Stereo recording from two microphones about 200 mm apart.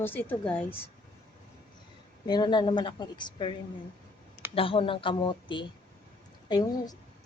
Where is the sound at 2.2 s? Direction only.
20° left (ahead or behind).